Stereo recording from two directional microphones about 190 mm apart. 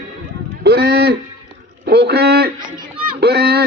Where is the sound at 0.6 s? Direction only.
55° right (ahead or behind).